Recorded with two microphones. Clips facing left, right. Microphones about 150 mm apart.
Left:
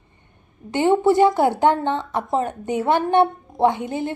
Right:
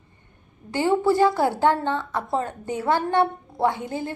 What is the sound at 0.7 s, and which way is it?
A woman's voice, 20° left (ahead or behind).